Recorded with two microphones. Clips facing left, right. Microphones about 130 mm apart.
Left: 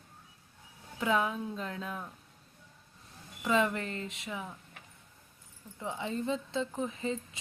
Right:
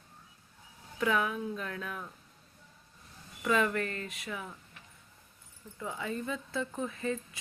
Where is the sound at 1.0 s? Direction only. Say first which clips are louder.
Even; 25° left (ahead or behind).